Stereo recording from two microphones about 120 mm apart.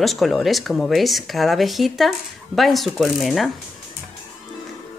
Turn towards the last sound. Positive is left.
turn(degrees=0)  # may be behind; listen again after turning